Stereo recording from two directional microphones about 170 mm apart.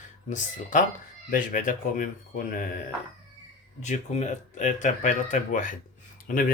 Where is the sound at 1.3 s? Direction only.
50° left (ahead or behind).